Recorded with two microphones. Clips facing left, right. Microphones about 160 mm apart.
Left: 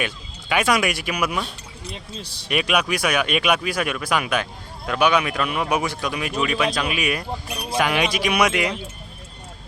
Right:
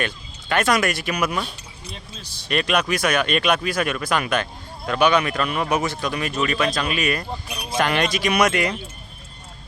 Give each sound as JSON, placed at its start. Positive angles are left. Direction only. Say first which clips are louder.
{"t": 0.0, "sound": "speech", "louder": "right 1 dB", "side_deg": 10}
{"t": 2.5, "sound": "speech", "louder": "right 1 dB", "side_deg": 10}